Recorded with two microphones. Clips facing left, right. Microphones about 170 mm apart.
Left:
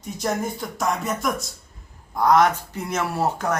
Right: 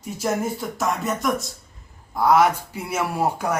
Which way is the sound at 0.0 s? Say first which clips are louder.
Right 1 dB; 5° right (ahead or behind).